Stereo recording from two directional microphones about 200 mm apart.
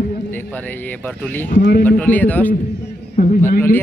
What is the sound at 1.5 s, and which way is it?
Speech, 45° left (ahead or behind).